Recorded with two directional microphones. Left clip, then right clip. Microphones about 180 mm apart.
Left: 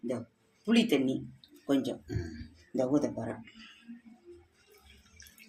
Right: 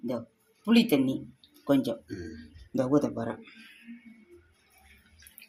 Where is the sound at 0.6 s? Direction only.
40° right (ahead or behind).